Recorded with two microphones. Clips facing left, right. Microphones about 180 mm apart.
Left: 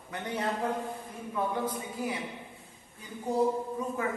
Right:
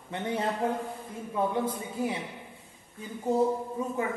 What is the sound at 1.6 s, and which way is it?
Speech, 25° right (ahead or behind).